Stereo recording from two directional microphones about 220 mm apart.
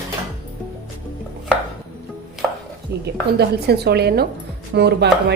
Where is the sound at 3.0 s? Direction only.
50° right (ahead or behind).